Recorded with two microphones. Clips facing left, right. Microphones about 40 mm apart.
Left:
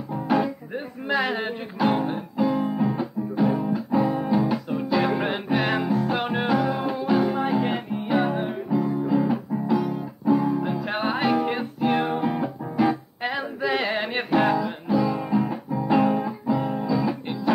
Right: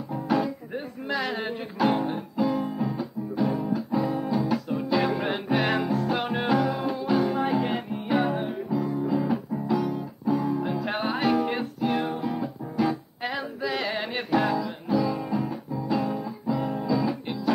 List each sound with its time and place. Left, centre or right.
0.1 s music: centre
11.8 s music: left
16.4 s music: centre